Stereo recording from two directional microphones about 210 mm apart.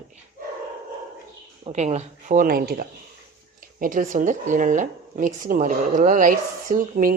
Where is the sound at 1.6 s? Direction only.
30° right (ahead or behind).